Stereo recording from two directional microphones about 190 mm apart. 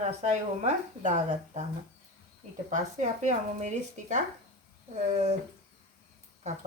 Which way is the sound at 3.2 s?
40° right (ahead or behind).